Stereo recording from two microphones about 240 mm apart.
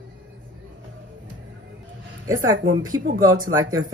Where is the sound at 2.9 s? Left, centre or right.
Right.